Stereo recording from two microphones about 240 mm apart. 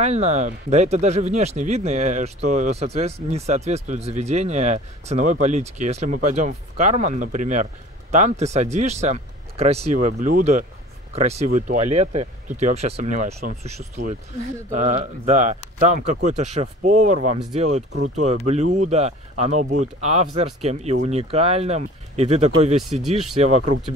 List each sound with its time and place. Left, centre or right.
0.0 s speech: right